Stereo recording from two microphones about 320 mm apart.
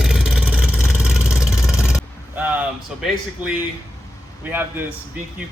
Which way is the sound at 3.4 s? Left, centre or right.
Centre.